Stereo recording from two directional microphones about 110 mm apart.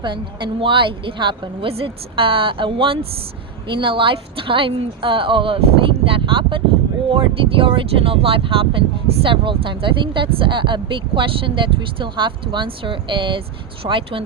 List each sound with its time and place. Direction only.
0.0 s speech: 45° right (ahead or behind)